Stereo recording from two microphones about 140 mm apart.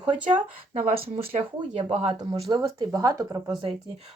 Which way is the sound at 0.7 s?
80° right.